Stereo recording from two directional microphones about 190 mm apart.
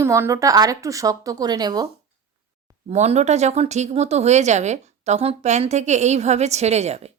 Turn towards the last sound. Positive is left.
turn(degrees=-35)  # may be behind; listen again after turning